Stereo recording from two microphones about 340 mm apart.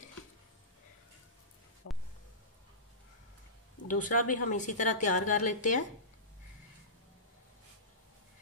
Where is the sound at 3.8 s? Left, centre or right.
Left.